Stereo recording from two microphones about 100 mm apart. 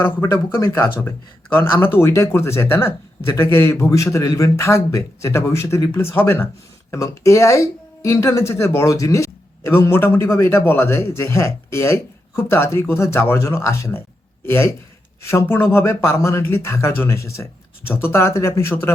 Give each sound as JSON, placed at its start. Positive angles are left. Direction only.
{"t": 0.6, "sound": "a man's voice", "side_deg": 25}